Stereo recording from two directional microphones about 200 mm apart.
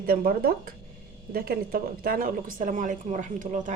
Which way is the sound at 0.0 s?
50° right (ahead or behind).